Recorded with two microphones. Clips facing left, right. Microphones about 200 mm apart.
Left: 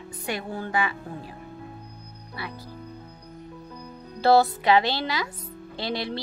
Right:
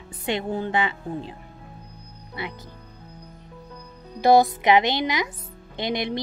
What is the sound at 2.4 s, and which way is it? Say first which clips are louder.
Speech: right 4 dB; 20° right (ahead or behind).